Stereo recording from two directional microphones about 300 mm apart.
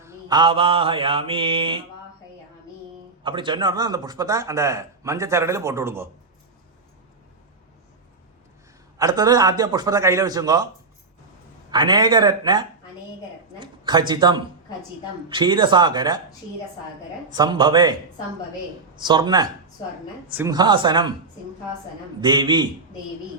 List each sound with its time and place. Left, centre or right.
0.0 s a man's voice: centre
3.2 s a man's voice: centre
9.0 s a man's voice: centre
11.7 s a man's voice: centre
17.2 s a man's voice: centre
18.9 s a man's voice: centre
22.2 s a man's voice: centre